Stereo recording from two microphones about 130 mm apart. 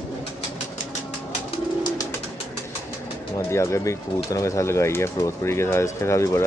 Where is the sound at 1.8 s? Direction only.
25° left (ahead or behind).